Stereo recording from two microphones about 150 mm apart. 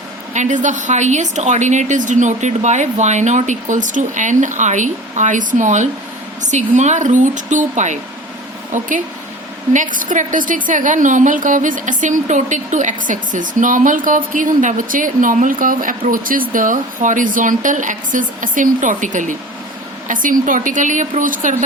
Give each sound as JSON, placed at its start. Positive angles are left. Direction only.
{"t": 0.3, "sound": "a woman's voice", "side_deg": -55}